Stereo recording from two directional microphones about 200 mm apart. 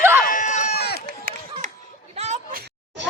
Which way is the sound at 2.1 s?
35° right (ahead or behind).